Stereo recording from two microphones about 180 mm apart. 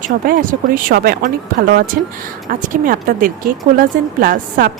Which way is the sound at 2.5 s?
50° right (ahead or behind).